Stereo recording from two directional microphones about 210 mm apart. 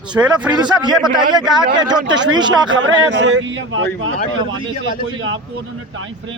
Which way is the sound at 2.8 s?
60° right (ahead or behind).